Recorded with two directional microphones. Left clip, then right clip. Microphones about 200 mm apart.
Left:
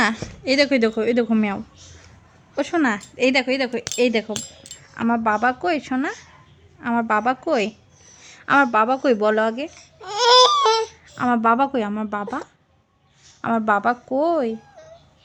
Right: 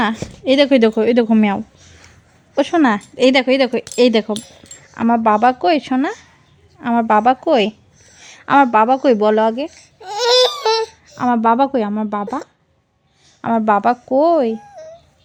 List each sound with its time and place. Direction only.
0.0 s a woman's voice: 20° right (ahead or behind)
9.6 s baby cry: 5° left (ahead or behind)
11.2 s a woman's voice: 15° right (ahead or behind)
13.4 s a woman's voice: 20° right (ahead or behind)